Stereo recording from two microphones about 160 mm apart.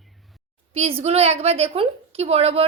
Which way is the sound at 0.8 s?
40° right (ahead or behind).